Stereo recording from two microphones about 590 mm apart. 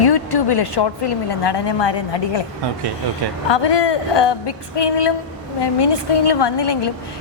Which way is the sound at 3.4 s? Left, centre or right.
Left.